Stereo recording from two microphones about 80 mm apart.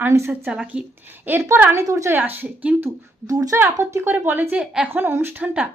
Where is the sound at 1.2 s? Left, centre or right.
Right.